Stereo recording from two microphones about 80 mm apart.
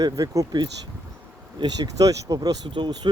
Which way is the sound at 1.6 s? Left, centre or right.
Right.